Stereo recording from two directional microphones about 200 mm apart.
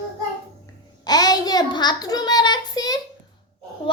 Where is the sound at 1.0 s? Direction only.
20° left (ahead or behind).